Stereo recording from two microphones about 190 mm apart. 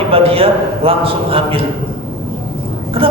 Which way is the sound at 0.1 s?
30° right (ahead or behind).